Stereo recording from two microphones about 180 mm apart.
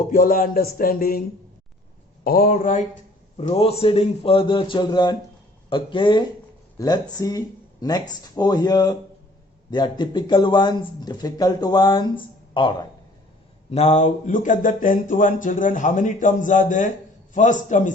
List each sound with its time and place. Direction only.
0.0 s speech: 50° left (ahead or behind)
2.2 s speech: 55° left (ahead or behind)
3.3 s a man's voice: 35° left (ahead or behind)
13.7 s speech: 35° left (ahead or behind)